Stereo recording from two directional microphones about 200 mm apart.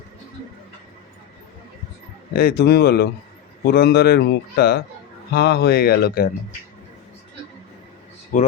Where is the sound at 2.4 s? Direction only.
50° left (ahead or behind).